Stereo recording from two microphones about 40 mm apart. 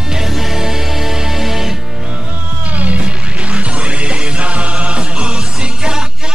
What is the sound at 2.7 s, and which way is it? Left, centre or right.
Music, right.